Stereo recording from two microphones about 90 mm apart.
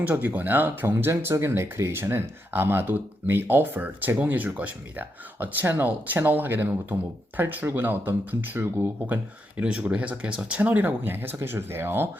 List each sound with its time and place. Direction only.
0.1 s speech: 20° right (ahead or behind)
9.6 s speech: 10° right (ahead or behind)